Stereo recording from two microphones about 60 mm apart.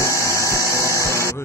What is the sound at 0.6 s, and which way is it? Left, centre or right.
Music, left.